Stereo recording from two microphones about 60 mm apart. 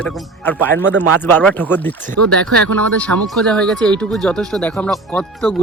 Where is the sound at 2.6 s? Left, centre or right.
Left.